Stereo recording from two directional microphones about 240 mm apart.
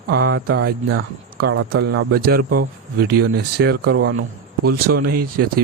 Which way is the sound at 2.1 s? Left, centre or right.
Right.